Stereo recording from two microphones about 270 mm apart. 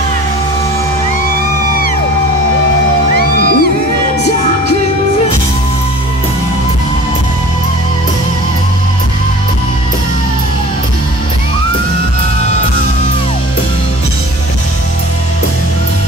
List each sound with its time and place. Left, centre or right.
3.2 s music: left